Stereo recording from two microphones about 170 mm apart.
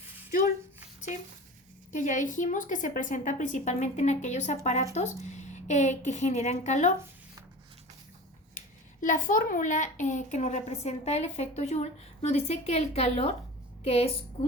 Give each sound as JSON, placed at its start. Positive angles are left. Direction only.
{"t": 1.9, "sound": "a woman's voice", "side_deg": 50}
{"t": 8.5, "sound": "a child's voice", "side_deg": 50}